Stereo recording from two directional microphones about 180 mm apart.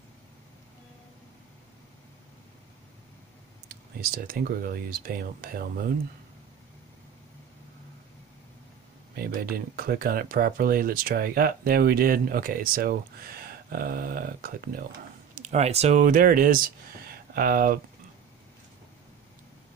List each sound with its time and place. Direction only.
3.6 s speech: 55° right (ahead or behind)
9.1 s speech: 55° right (ahead or behind)
15.3 s speech: 40° right (ahead or behind)